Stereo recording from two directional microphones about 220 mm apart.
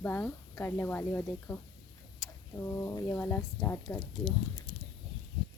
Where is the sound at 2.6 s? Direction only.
15° left (ahead or behind).